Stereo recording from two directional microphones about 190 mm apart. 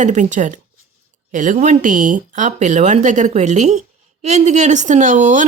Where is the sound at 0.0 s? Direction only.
40° right (ahead or behind).